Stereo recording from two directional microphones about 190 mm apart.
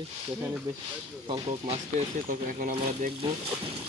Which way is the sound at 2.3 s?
45° right (ahead or behind).